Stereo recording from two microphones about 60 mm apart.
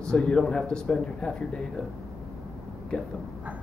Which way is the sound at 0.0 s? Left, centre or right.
Centre.